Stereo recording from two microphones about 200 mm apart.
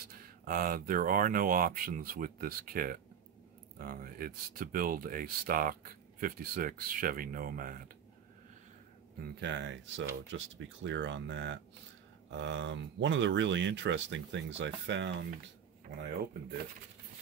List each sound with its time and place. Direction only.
0.0 s speech: 45° right (ahead or behind)
9.2 s speech: 60° right (ahead or behind)